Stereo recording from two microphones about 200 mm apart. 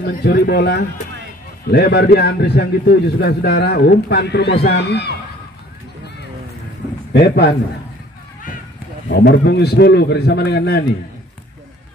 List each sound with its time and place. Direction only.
0.0 s a man's voice: 55° left (ahead or behind)
7.1 s speech: 55° left (ahead or behind)
9.1 s a man's voice: 60° left (ahead or behind)